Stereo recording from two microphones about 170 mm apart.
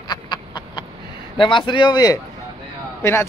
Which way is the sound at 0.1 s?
25° left (ahead or behind).